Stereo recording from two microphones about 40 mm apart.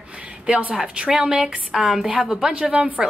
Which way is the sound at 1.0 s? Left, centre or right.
Centre.